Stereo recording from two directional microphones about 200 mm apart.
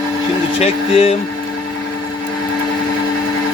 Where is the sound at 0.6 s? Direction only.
30° left (ahead or behind).